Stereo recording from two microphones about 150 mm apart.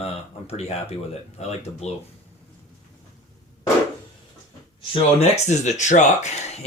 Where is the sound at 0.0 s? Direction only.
40° left (ahead or behind).